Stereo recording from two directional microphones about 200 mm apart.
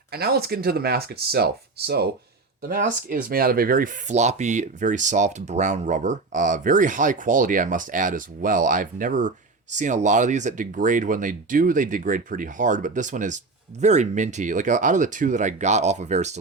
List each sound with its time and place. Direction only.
0.1 s speech: 50° right (ahead or behind)
2.6 s speech: 45° right (ahead or behind)